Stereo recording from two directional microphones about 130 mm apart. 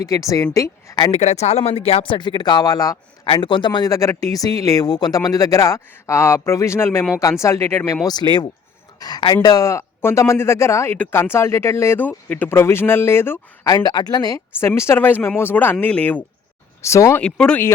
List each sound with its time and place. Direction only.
0.0 s speech: 25° left (ahead or behind)
1.1 s speech: 55° left (ahead or behind); by 7.9 s 20° left (ahead or behind)
8.0 s speech: 35° left (ahead or behind); by 13.4 s 15° left (ahead or behind)
13.7 s speech: 30° left (ahead or behind)
14.6 s speech: 20° left (ahead or behind)
16.8 s speech: 20° left (ahead or behind)
17.2 s speech: 5° left (ahead or behind)